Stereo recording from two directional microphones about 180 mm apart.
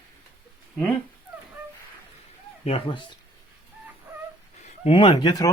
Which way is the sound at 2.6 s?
35° left (ahead or behind).